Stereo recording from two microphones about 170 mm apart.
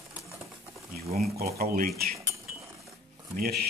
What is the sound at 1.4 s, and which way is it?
Speech, 60° right (ahead or behind).